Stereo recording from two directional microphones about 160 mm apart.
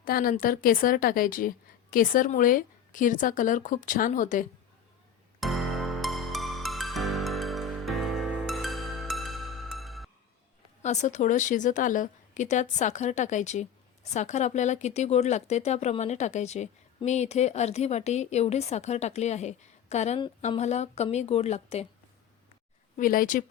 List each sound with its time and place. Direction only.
0.0 s a woman's voice: 65° left (ahead or behind)
5.4 s music: centre (ahead or behind)
10.8 s speech: 45° left (ahead or behind)
23.0 s a woman's voice: 60° left (ahead or behind)